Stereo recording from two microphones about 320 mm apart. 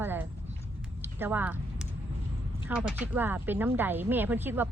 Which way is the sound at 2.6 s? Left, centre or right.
Centre.